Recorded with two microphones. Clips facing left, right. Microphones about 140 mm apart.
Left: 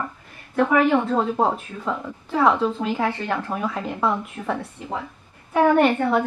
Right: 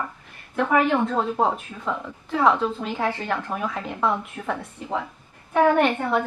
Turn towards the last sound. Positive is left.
turn(degrees=5)  # may be behind; listen again after turning